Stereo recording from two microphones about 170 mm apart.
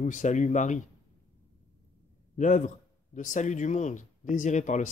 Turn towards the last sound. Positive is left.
turn(degrees=45)  # may be behind; listen again after turning